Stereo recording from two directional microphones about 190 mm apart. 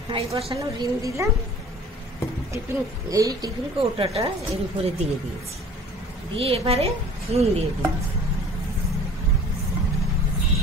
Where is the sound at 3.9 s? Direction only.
30° right (ahead or behind).